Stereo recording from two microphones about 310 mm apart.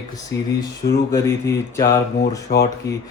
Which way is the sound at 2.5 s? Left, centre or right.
Left.